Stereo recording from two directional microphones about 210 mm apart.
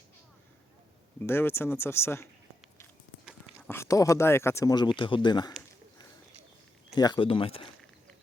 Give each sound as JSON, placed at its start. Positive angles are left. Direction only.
{"t": 1.2, "sound": "speech", "side_deg": 10}
{"t": 3.7, "sound": "speech", "side_deg": 15}
{"t": 6.9, "sound": "speech", "side_deg": 20}